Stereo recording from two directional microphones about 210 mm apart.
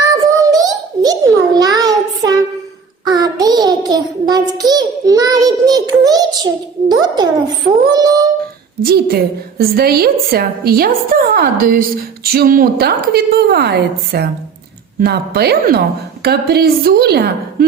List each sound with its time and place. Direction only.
0.0 s a sound: 15° right (ahead or behind)
7.9 s singing: 15° right (ahead or behind)
8.8 s a woman's voice: 45° right (ahead or behind)